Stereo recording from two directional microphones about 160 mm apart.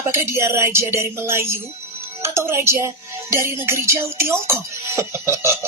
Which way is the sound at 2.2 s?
15° right (ahead or behind).